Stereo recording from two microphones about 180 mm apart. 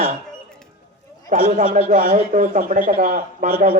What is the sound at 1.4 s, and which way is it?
A man's voice, 45° right (ahead or behind).